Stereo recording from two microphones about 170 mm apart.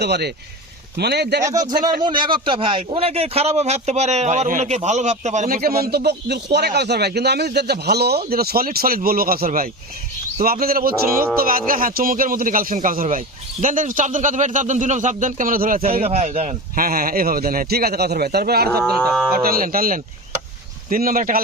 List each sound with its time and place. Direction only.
0.0 s speech: 75° right (ahead or behind)
1.4 s a man's voice: 20° right (ahead or behind); by 5.7 s 50° right (ahead or behind)
5.8 s a man's voice: 70° right (ahead or behind)
15.8 s a man's voice: 35° right (ahead or behind)
16.7 s a man's voice: 60° right (ahead or behind)
18.8 s livestock: 5° left (ahead or behind)
19.3 s a man's voice: 60° right (ahead or behind)